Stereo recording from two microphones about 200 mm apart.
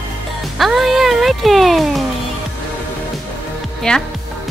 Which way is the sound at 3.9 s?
5° left (ahead or behind).